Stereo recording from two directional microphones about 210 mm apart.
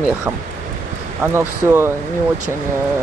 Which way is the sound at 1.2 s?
10° right (ahead or behind).